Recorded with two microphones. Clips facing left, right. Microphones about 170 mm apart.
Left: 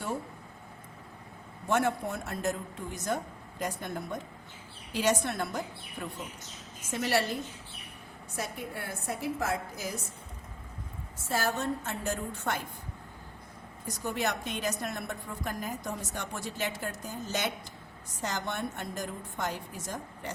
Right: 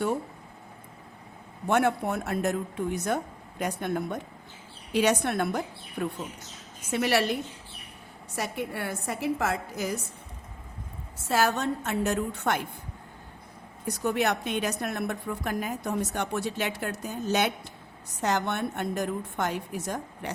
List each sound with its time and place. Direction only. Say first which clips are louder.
1.6 s a woman's voice: right 4 dB; 65° right (ahead or behind)
6.9 s a woman's voice: right 4 dB; 70° right (ahead or behind)
8.4 s a woman's voice: right 5 dB; 75° right (ahead or behind)
11.3 s a woman's voice: right 5 dB; 75° right (ahead or behind)
13.8 s a woman's voice: right 6 dB; 65° right (ahead or behind)